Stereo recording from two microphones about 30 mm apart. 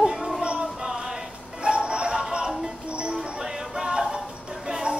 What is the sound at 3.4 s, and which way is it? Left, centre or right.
Music, right.